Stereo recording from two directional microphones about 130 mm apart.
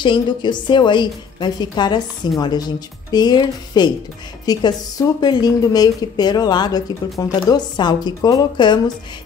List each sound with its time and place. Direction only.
0.0 s a woman's voice: 35° left (ahead or behind)